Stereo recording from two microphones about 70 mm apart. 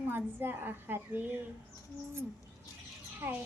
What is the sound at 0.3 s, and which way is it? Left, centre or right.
Speech, right.